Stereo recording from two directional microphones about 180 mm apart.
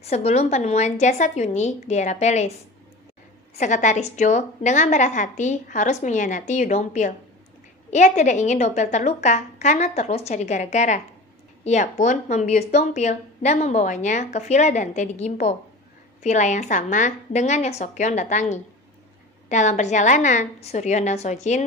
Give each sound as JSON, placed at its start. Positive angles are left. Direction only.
{"t": 0.0, "sound": "speech", "side_deg": 35}
{"t": 3.5, "sound": "a woman's voice", "side_deg": 45}